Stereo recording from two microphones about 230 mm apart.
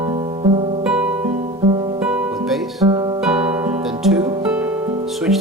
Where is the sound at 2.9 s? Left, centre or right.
Centre.